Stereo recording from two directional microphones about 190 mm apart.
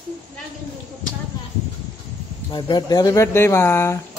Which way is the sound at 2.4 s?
25° left (ahead or behind).